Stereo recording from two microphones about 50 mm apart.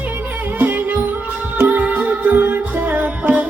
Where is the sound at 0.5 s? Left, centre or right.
Right.